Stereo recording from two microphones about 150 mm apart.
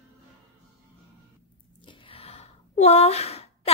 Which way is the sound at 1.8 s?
35° left (ahead or behind).